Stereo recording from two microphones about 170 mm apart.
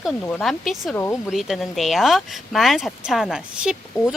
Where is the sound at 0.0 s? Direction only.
5° left (ahead or behind).